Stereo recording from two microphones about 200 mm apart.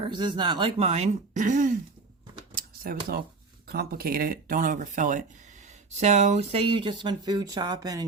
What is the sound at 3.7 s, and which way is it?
Speech, 50° right (ahead or behind).